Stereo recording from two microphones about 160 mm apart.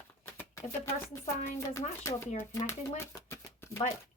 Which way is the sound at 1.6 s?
20° left (ahead or behind).